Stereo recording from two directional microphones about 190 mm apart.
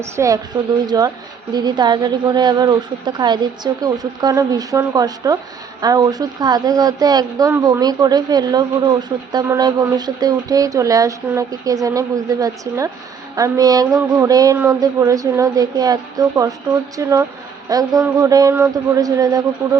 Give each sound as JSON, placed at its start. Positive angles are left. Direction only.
{"t": 0.0, "sound": "a woman's voice", "side_deg": -15}